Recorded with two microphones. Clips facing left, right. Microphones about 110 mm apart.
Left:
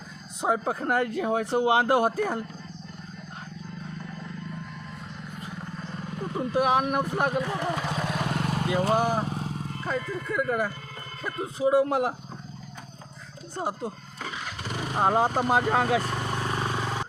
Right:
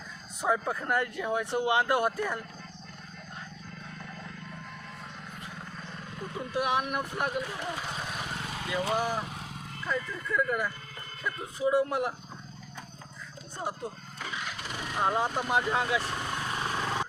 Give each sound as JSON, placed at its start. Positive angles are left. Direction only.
{"t": 0.6, "sound": "speech", "side_deg": 30}
{"t": 6.3, "sound": "speech", "side_deg": 40}
{"t": 7.4, "sound": "vehicle", "side_deg": 65}
{"t": 8.4, "sound": "speech", "side_deg": 45}
{"t": 13.6, "sound": "speech", "side_deg": 30}
{"t": 14.8, "sound": "vehicle", "side_deg": 35}
{"t": 15.4, "sound": "speech", "side_deg": 35}
{"t": 15.6, "sound": "speech", "side_deg": 50}
{"t": 16.7, "sound": "vehicle", "side_deg": 10}